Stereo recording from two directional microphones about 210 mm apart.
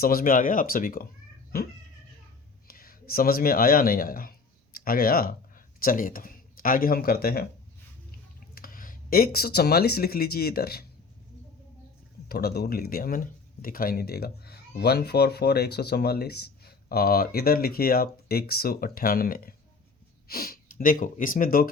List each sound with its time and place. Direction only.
0.0 s speech: 45° left (ahead or behind)
2.6 s speech: 45° left (ahead or behind)
12.3 s speech: 50° left (ahead or behind)